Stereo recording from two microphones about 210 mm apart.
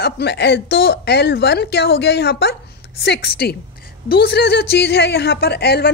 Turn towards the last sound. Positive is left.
turn(degrees=50)  # may be behind; listen again after turning